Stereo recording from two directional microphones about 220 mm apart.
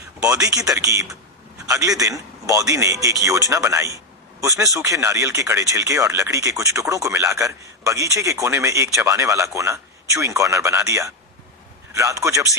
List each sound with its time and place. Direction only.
0.3 s a man's voice: 15° right (ahead or behind)